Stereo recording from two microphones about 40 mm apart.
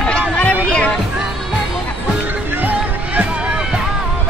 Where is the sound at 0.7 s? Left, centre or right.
Left.